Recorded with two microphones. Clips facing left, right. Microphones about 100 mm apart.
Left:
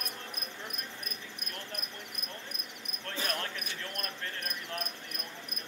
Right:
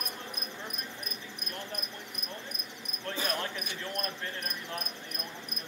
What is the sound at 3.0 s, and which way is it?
Basketball bounce, 15° right (ahead or behind).